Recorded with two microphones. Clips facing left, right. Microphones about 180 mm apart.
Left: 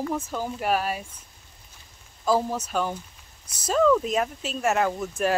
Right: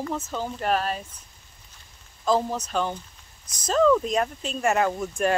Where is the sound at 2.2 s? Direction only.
10° left (ahead or behind).